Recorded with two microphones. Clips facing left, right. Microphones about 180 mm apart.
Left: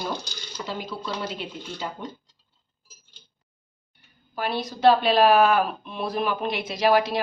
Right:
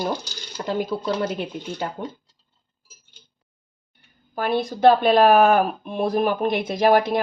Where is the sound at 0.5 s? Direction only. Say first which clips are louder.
Right 8 dB; 50° right (ahead or behind).